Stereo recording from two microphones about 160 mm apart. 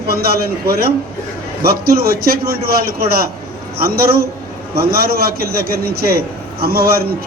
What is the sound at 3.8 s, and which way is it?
A man's voice, 75° right (ahead or behind).